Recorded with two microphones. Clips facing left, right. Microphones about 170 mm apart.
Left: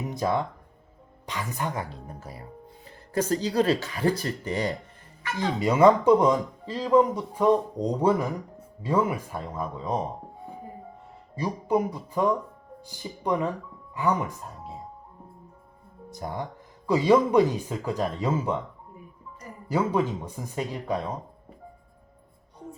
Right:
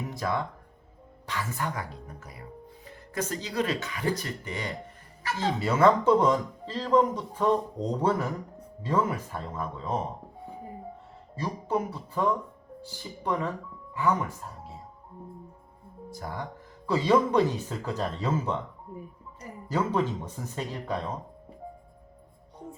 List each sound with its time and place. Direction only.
0.0 s a woman's voice: 20° left (ahead or behind)
5.4 s speech: 15° left (ahead or behind)
11.3 s speech: 15° left (ahead or behind)
16.0 s speech: 20° left (ahead or behind)
19.6 s speech: 10° left (ahead or behind)